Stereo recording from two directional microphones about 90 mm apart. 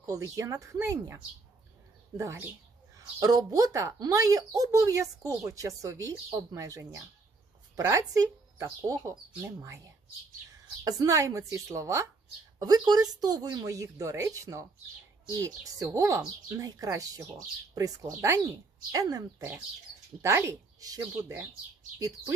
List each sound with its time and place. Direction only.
0.0 s speech: 40° right (ahead or behind)
12.5 s speech: 45° right (ahead or behind)